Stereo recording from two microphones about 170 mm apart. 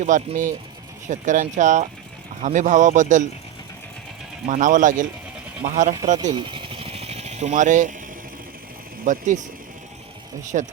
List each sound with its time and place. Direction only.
0.0 s speech: 50° right (ahead or behind)
4.4 s speech: 50° right (ahead or behind)
6.3 s a sound: 30° right (ahead or behind); by 7.9 s 45° right (ahead or behind)
9.0 s speech: 50° right (ahead or behind)
10.5 s speech: 45° right (ahead or behind)